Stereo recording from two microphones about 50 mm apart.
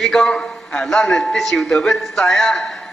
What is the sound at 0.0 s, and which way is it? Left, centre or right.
A man's voice, centre.